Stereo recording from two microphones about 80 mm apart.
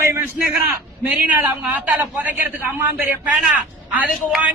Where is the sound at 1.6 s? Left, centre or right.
Centre.